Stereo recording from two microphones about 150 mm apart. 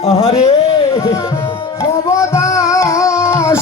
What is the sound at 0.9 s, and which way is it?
Music, 20° left (ahead or behind).